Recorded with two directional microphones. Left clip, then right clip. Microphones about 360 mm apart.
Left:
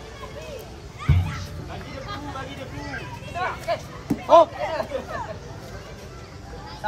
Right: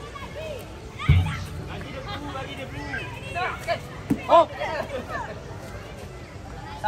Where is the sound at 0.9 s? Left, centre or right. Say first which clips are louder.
Right 2 dB; centre.